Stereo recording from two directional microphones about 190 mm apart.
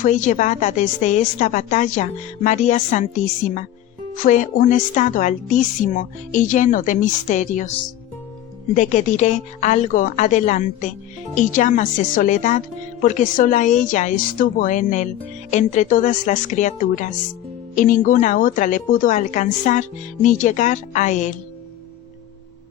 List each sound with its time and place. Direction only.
0.0 s a woman's voice: 40° left (ahead or behind)
4.2 s a woman's voice: 45° left (ahead or behind)
8.7 s a woman's voice: 40° left (ahead or behind)